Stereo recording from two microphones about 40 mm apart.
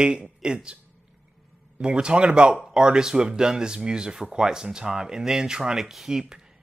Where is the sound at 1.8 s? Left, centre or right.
Right.